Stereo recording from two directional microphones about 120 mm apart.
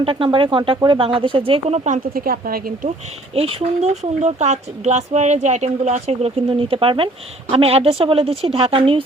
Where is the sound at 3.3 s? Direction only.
55° right (ahead or behind).